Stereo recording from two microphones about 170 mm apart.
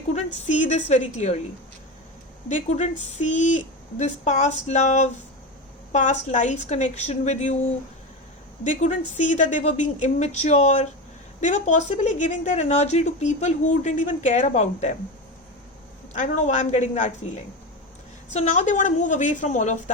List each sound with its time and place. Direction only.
0.4 s speech: 45° left (ahead or behind)
2.5 s speech: 45° left (ahead or behind)
16.1 s speech: 45° left (ahead or behind)
18.3 s speech: 45° left (ahead or behind)